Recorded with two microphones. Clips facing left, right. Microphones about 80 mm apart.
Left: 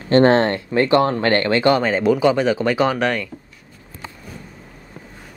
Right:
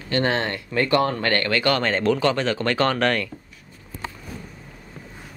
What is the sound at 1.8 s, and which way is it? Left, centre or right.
Speech, centre.